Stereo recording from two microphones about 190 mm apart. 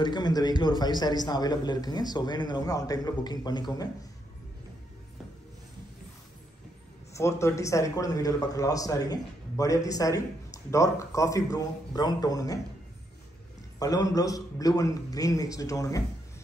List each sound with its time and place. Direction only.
0.0 s a man's voice: 20° left (ahead or behind)
7.2 s a man's voice: 15° left (ahead or behind)
13.7 s a man's voice: 20° left (ahead or behind)